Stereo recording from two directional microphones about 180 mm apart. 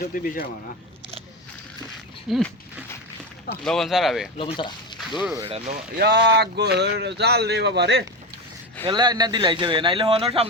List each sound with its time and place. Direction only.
0.0 s speech: 55° left (ahead or behind)
2.3 s speech: centre (ahead or behind)
4.4 s speech: 30° left (ahead or behind)
4.9 s music: centre (ahead or behind)
5.5 s speech: 35° right (ahead or behind)
6.0 s speech: 70° right (ahead or behind)
8.9 s speech: 25° right (ahead or behind)